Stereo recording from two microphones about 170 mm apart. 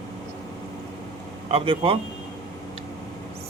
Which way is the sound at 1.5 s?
35° right (ahead or behind).